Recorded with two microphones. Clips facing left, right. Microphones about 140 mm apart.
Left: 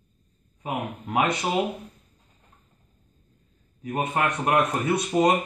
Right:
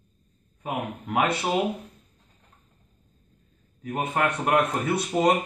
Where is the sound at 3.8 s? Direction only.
10° left (ahead or behind).